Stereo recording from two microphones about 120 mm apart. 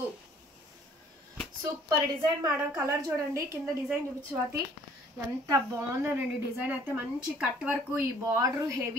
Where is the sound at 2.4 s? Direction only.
25° right (ahead or behind).